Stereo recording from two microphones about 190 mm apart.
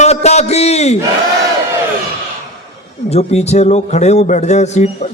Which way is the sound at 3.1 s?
35° left (ahead or behind).